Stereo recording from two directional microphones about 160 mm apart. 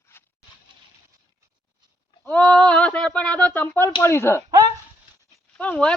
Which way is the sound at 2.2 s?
10° left (ahead or behind).